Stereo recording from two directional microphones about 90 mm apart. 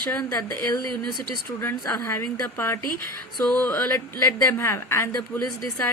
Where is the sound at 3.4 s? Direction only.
10° left (ahead or behind).